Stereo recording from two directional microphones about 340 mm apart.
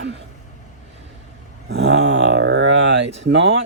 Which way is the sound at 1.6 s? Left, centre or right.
Right.